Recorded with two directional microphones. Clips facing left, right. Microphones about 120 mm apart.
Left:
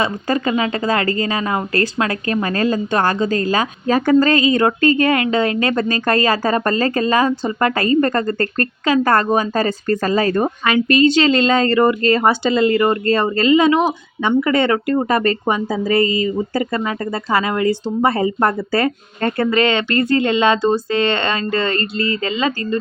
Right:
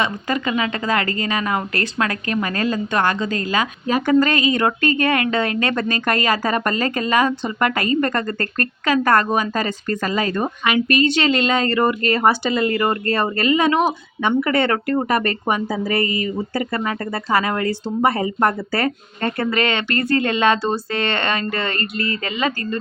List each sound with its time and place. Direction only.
0.0 s speech: 35° left (ahead or behind)